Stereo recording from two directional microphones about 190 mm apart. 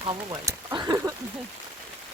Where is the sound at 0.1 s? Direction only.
20° right (ahead or behind).